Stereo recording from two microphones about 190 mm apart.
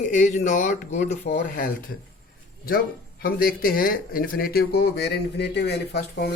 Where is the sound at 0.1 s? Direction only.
40° left (ahead or behind).